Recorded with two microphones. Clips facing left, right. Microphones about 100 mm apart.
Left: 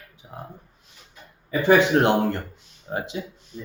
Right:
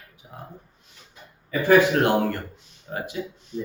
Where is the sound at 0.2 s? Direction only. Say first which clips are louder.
Left 3 dB; 5° left (ahead or behind).